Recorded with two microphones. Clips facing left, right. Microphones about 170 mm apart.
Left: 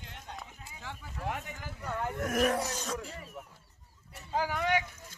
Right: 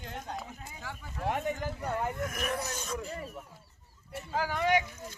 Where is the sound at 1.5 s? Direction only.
45° right (ahead or behind).